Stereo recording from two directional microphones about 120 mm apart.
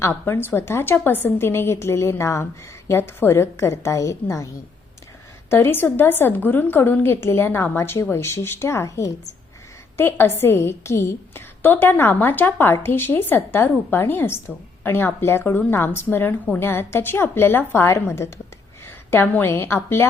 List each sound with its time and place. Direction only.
0.0 s a woman's voice: 20° left (ahead or behind)
5.5 s a woman's voice: 20° left (ahead or behind)